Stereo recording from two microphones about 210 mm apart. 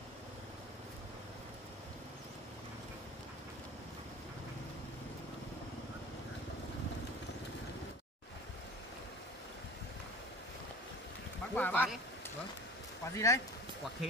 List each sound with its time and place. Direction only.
11.5 s speech: 10° left (ahead or behind)
13.0 s speech: 15° left (ahead or behind)